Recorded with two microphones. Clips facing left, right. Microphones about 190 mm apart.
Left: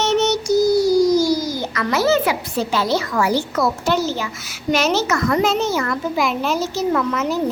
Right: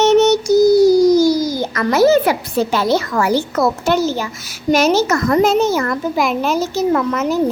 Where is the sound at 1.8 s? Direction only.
45° right (ahead or behind).